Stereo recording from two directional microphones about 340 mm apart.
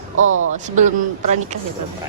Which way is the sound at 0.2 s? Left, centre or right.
Right.